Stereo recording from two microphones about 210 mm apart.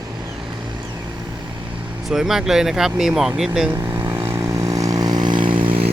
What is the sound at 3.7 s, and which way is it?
Vehicle, 15° right (ahead or behind).